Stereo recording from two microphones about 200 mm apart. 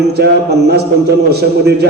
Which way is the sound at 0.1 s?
55° right (ahead or behind).